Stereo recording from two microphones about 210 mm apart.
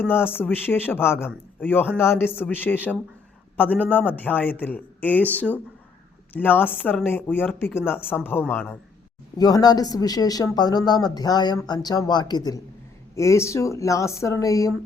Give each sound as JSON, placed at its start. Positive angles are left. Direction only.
{"t": 0.1, "sound": "a man's voice", "side_deg": 10}
{"t": 9.4, "sound": "a man's voice", "side_deg": 20}